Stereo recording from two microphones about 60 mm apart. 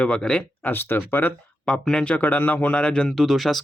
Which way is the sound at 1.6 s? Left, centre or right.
Centre.